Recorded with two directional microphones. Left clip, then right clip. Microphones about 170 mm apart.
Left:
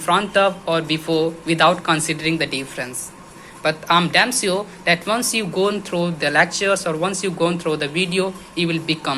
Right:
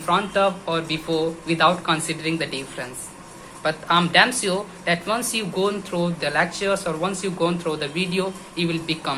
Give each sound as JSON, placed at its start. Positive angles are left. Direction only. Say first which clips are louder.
{"t": 0.0, "sound": "speech", "louder": "left 3 dB", "side_deg": 35}